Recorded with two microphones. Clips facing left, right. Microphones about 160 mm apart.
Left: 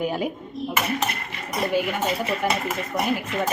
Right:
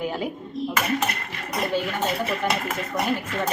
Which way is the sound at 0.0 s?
15° left (ahead or behind).